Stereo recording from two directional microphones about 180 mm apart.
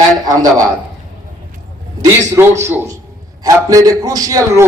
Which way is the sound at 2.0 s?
15° right (ahead or behind).